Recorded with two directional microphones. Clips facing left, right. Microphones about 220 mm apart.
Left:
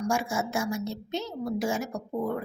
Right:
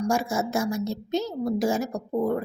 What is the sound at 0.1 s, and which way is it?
A woman's voice, 40° right (ahead or behind).